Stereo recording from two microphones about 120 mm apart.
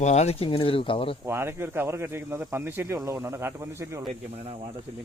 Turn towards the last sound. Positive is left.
turn(degrees=-20)  # may be behind; listen again after turning